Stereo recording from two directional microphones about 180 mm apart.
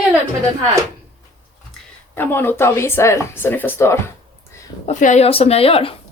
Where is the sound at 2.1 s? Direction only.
10° left (ahead or behind).